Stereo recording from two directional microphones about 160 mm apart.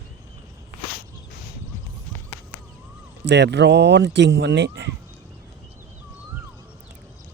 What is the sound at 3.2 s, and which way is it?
Speech, 90° right.